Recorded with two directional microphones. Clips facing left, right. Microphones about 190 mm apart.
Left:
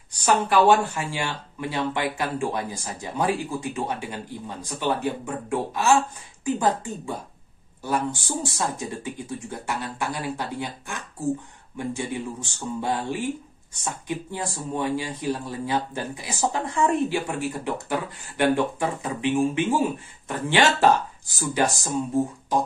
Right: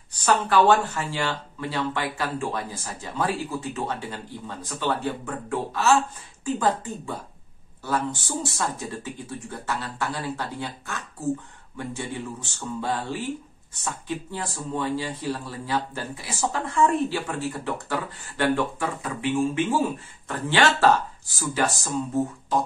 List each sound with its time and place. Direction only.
0.2 s speech: 15° left (ahead or behind)